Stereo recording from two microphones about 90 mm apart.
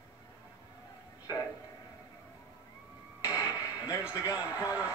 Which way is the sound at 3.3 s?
40° left (ahead or behind).